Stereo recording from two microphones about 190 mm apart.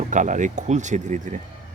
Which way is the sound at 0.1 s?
40° right (ahead or behind).